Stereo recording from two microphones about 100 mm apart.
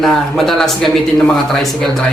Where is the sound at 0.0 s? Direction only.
Centre (ahead or behind).